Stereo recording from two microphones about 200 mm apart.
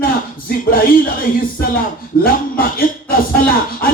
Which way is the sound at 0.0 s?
45° left (ahead or behind).